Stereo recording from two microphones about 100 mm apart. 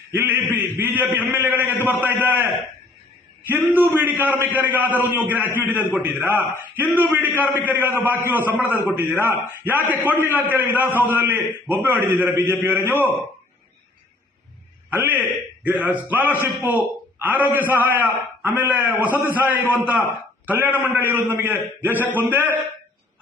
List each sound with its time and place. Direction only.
0.1 s a man's voice: 20° right (ahead or behind)
3.5 s a man's voice: 20° right (ahead or behind)
14.8 s a man's voice: 20° right (ahead or behind)